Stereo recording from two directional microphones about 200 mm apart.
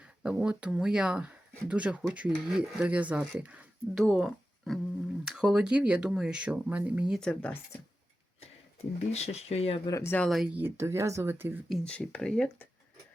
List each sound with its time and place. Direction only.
0.0 s speech: 5° right (ahead or behind)
8.4 s speech: 30° left (ahead or behind)
9.9 s speech: 10° left (ahead or behind)
10.2 s speech: centre (ahead or behind)
11.9 s speech: 5° left (ahead or behind)